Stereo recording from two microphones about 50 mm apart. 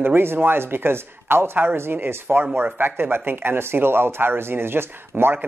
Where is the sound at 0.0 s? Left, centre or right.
Right.